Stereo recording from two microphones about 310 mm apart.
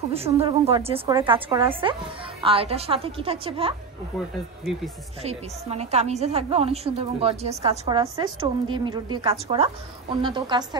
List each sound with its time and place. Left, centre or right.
0.1 s a woman's voice: centre
5.2 s a woman's voice: centre